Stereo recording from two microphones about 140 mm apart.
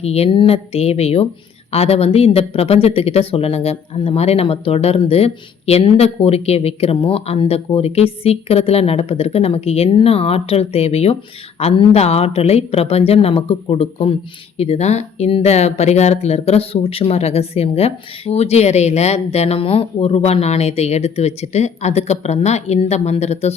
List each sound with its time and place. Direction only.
0.0 s speech: 45° left (ahead or behind)